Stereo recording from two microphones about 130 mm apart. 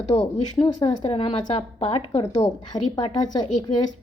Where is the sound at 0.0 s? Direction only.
60° left (ahead or behind).